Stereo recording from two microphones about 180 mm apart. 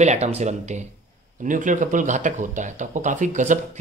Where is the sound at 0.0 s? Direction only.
40° right (ahead or behind).